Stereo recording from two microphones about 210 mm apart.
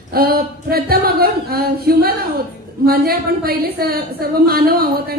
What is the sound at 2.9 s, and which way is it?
A woman's voice, 45° right (ahead or behind).